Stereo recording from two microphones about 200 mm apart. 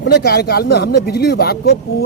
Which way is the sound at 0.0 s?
55° left (ahead or behind).